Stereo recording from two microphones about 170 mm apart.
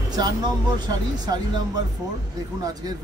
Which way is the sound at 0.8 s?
25° right (ahead or behind).